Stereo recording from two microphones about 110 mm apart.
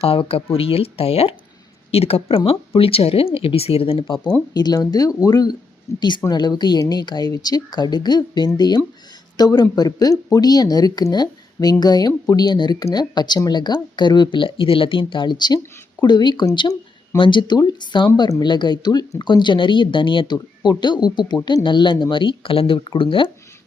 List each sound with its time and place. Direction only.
0.0 s speech: 65° left (ahead or behind)
4.5 s speech: 35° left (ahead or behind)